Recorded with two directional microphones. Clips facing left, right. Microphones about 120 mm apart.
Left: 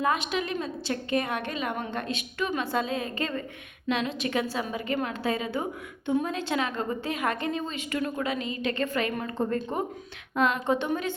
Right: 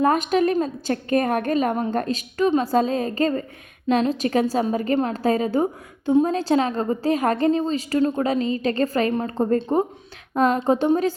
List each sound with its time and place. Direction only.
0.0 s a woman's voice: 45° right (ahead or behind)